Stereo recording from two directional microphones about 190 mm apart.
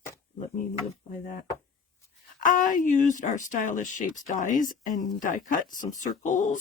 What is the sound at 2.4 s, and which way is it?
Speech, 45° left (ahead or behind).